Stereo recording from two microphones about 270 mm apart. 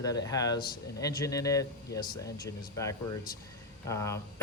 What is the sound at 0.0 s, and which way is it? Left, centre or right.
Speech, centre.